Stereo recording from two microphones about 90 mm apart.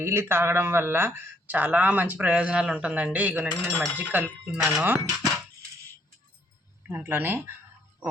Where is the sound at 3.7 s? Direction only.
5° left (ahead or behind).